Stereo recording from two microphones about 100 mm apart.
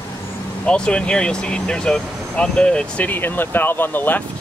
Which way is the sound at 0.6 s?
10° left (ahead or behind).